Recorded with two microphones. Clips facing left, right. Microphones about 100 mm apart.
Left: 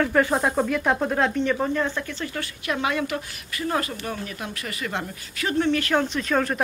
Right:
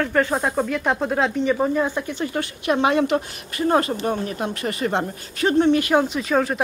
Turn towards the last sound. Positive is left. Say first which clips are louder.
# right 3 dB
turn(degrees=-5)  # may be behind; listen again after turning